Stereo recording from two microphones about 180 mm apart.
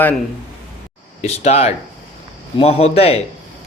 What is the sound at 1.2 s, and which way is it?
A man's voice, 35° left (ahead or behind).